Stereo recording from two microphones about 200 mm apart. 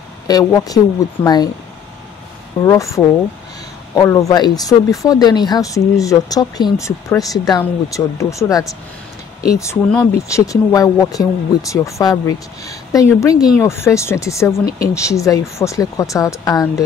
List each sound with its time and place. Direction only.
0.3 s speech: 15° left (ahead or behind)
2.6 s speech: 15° left (ahead or behind)
9.8 s speech: 5° left (ahead or behind)
10.2 s speech: 15° left (ahead or behind)